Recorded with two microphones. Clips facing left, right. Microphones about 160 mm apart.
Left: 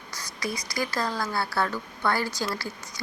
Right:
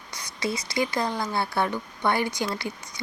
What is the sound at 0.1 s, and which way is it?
Speech, 25° right (ahead or behind).